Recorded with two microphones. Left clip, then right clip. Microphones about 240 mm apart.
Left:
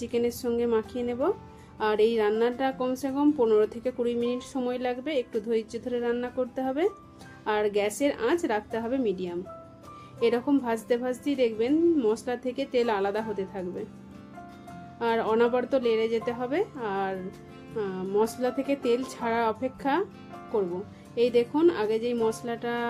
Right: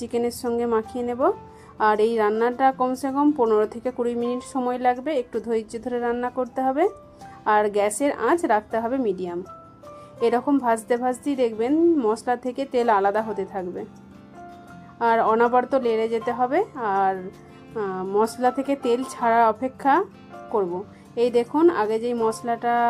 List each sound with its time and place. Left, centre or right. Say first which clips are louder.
0.0 s a woman's voice: right 3 dB; centre
14.9 s a woman's voice: right 6 dB; centre